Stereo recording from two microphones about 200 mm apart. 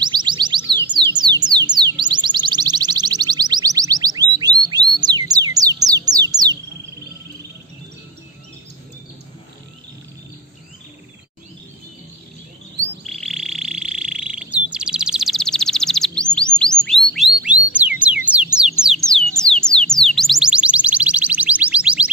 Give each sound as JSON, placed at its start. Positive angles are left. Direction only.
{"t": 0.0, "sound": "music", "side_deg": -20}
{"t": 13.0, "sound": "frog", "side_deg": 0}
{"t": 16.3, "sound": "music", "side_deg": 5}
{"t": 17.5, "sound": "music", "side_deg": -5}
{"t": 19.6, "sound": "a sound", "side_deg": 5}
{"t": 20.1, "sound": "music", "side_deg": 0}